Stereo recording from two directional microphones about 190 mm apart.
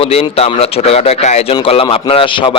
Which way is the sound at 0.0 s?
30° left (ahead or behind).